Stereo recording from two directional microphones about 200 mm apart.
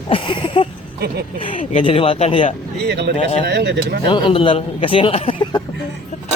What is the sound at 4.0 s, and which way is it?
A man's voice, 25° left (ahead or behind).